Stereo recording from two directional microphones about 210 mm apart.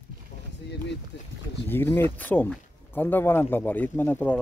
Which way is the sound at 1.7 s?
10° left (ahead or behind).